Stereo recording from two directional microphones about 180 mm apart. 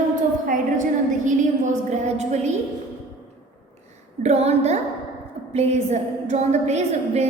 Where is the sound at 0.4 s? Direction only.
45° right (ahead or behind).